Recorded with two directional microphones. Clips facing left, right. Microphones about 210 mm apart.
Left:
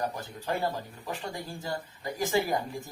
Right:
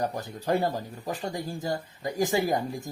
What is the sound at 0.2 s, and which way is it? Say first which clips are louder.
Speech: right 5 dB; 40° right (ahead or behind).